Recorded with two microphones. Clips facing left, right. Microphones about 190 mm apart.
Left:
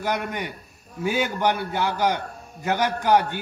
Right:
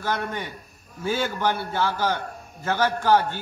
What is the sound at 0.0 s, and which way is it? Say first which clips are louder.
A man's voice: left 1 dB; 15° left (ahead or behind).